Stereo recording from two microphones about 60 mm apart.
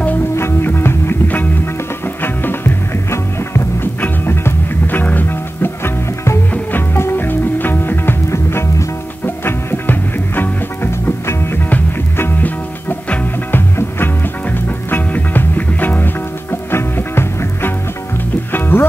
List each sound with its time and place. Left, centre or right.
0.4 s music: left
3.1 s music: left
6.9 s music: left
8.3 s music: left
12.2 s music: left
16.7 s music: left